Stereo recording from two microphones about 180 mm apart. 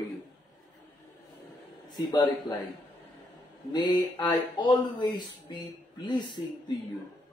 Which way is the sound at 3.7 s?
25° left (ahead or behind).